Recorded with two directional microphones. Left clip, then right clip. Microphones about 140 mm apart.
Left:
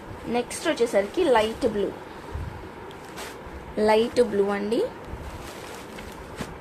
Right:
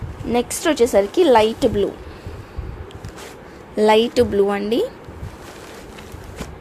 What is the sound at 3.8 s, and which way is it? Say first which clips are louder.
Speech: right 6 dB; 45° right (ahead or behind).